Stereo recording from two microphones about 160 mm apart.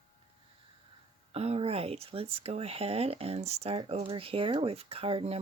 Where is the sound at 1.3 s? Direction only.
40° right (ahead or behind).